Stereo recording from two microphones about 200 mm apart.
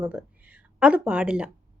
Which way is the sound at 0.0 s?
5° right (ahead or behind).